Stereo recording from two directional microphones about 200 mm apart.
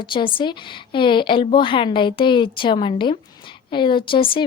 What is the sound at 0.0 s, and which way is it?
Speech, 25° left (ahead or behind).